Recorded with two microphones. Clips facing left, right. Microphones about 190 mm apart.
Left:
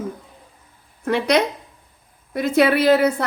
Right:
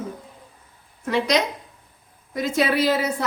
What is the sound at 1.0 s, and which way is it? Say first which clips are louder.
A woman's voice: left 3 dB; 60° left (ahead or behind).